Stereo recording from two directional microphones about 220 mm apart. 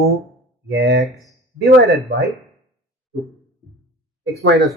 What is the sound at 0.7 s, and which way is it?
Speech, 45° right (ahead or behind).